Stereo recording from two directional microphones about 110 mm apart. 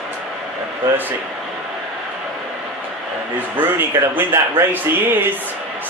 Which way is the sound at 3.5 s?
15° right (ahead or behind).